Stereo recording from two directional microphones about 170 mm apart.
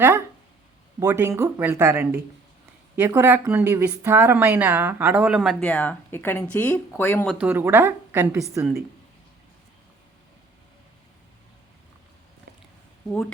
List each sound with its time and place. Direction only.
0.9 s speech: 20° right (ahead or behind); by 5.6 s centre (ahead or behind)
5.6 s speech: 10° left (ahead or behind)
7.3 s speech: 10° right (ahead or behind)